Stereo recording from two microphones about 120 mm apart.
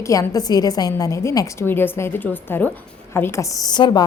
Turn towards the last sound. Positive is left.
turn(degrees=35)  # may be behind; listen again after turning